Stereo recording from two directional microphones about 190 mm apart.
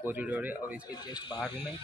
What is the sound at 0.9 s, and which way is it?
Speech, 20° left (ahead or behind).